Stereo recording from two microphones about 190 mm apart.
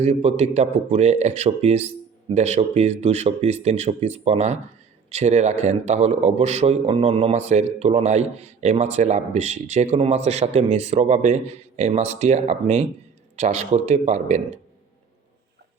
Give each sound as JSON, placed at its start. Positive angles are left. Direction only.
{"t": 0.0, "sound": "speech", "side_deg": -35}